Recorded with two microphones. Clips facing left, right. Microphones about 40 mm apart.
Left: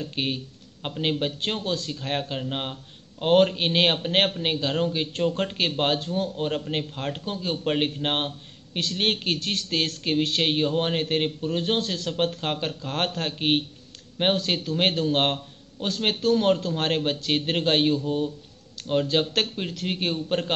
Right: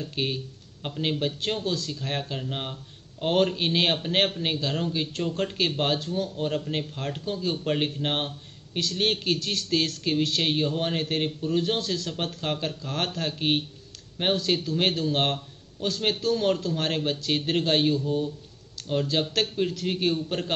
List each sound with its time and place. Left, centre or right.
0.0 s speech: left
5.3 s speech: left
19.7 s speech: left